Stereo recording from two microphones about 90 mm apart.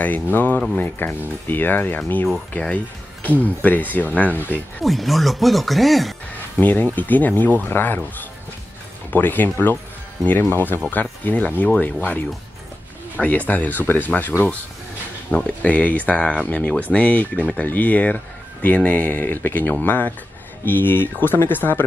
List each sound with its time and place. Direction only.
0.0 s speech: 20° left (ahead or behind)
4.8 s speech: centre (ahead or behind)
6.5 s speech: 20° left (ahead or behind)
15.3 s speech: 15° left (ahead or behind)